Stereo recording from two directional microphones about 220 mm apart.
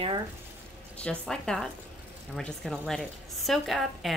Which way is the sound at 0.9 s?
5° left (ahead or behind).